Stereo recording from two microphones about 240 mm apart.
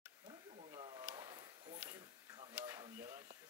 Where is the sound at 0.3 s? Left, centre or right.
Right.